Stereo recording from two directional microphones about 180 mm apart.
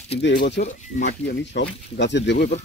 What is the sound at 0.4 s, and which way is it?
Speech, 55° left (ahead or behind).